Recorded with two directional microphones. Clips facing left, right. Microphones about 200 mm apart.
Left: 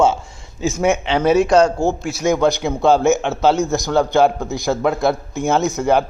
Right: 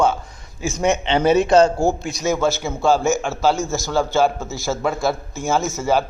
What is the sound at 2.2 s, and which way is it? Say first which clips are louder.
A man's voice: left 4 dB; 15° left (ahead or behind).